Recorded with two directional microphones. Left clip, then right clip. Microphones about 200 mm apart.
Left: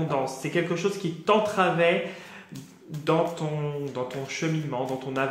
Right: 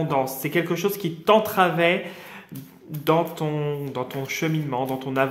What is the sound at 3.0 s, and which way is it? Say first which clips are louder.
Speech: right 3 dB; 40° right (ahead or behind).